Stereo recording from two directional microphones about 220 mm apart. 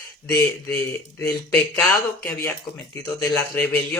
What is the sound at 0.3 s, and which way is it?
Speech, 10° left (ahead or behind).